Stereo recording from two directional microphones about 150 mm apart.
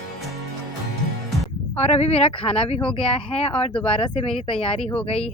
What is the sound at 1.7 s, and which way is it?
Speech, 45° left (ahead or behind).